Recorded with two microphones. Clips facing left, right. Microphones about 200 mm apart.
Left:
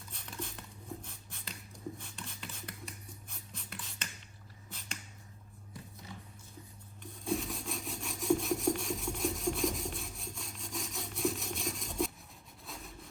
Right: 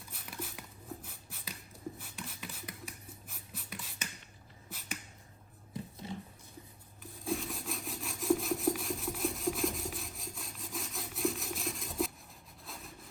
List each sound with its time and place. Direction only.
0.1 s a sound: 5° right (ahead or behind)
5.7 s music: 25° right (ahead or behind)
7.0 s rub: centre (ahead or behind)